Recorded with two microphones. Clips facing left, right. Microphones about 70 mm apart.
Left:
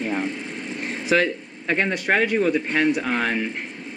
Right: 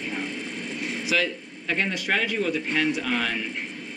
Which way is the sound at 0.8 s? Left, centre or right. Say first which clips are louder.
Left 5 dB; left.